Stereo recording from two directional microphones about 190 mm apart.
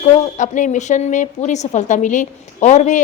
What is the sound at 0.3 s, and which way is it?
A woman's voice, 40° left (ahead or behind).